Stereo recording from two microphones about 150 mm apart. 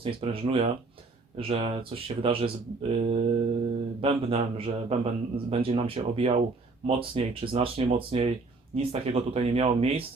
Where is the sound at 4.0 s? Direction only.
40° right (ahead or behind).